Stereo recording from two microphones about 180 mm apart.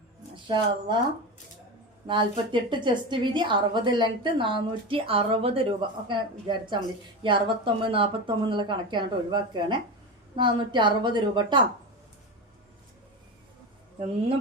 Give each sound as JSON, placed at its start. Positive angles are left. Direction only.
{"t": 0.4, "sound": "a woman's voice", "side_deg": -25}
{"t": 2.0, "sound": "a woman's voice", "side_deg": -25}